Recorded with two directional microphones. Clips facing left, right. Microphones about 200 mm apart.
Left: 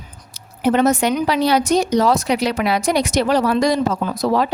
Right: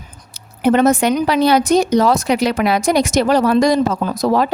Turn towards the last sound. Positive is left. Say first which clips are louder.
# right 2 dB
turn(degrees=-45)  # may be behind; listen again after turning